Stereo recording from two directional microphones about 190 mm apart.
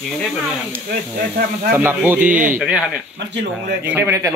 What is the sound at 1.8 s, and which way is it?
Speech, 10° right (ahead or behind).